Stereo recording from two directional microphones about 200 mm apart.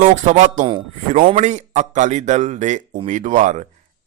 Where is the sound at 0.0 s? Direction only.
35° right (ahead or behind).